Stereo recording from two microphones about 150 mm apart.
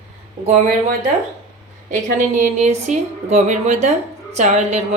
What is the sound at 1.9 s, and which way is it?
A woman's voice, 60° right (ahead or behind).